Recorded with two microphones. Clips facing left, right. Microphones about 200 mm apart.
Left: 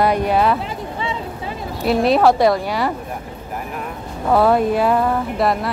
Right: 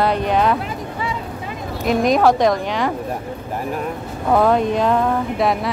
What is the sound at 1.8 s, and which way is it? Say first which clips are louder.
Speech: left 1 dB; 35° left (ahead or behind).